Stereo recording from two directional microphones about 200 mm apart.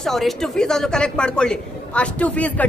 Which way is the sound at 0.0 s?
Centre (ahead or behind).